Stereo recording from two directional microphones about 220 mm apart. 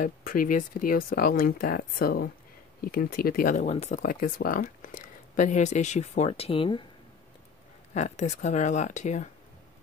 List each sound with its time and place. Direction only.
0.0 s speech: 40° left (ahead or behind); by 6.9 s 25° left (ahead or behind)
7.9 s speech: 30° left (ahead or behind)